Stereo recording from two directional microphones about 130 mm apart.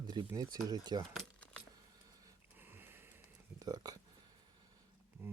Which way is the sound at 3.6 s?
30° right (ahead or behind).